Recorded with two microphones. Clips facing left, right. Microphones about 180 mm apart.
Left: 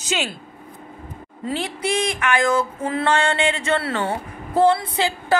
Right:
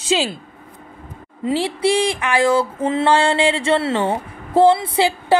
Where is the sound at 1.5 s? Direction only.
30° right (ahead or behind).